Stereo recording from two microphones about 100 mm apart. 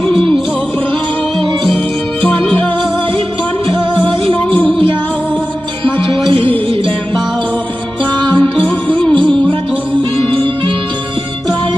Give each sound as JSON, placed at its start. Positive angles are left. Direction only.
{"t": 2.2, "sound": "music", "side_deg": 10}
{"t": 8.4, "sound": "music", "side_deg": 15}